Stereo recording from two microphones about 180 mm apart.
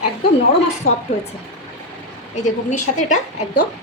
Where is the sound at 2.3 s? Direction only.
40° left (ahead or behind).